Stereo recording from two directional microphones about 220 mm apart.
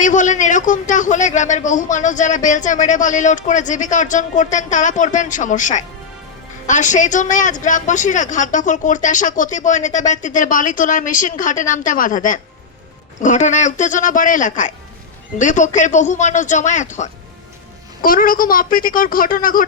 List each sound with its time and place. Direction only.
0.0 s a man's voice: 35° left (ahead or behind)